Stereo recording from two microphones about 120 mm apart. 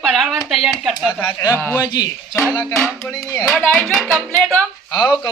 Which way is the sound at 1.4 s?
25° left (ahead or behind).